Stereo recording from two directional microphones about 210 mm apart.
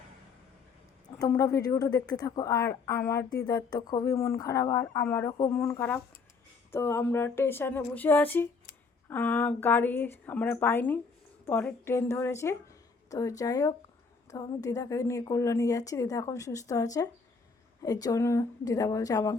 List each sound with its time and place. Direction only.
1.2 s a woman's voice: 15° left (ahead or behind)